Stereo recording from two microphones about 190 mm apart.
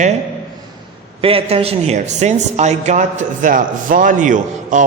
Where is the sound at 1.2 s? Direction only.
30° right (ahead or behind).